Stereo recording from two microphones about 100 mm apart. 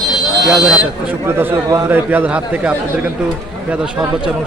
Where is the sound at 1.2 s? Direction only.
25° right (ahead or behind); by 4.0 s 5° right (ahead or behind).